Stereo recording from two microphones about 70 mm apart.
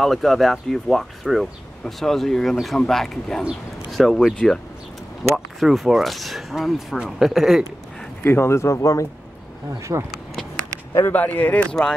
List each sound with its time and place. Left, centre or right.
0.0 s speech: centre
8.2 s speech: left
9.8 s speech: right
11.1 s speech: left